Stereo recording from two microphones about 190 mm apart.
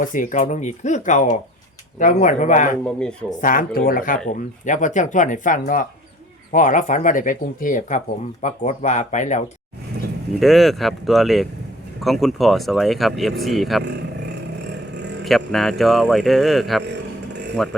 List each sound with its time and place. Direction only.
0.0 s speech: 45° left (ahead or behind)
3.0 s speech: 5° left (ahead or behind)
3.4 s speech: 45° left (ahead or behind)
10.4 s speech: centre (ahead or behind)
15.2 s a man's voice: centre (ahead or behind)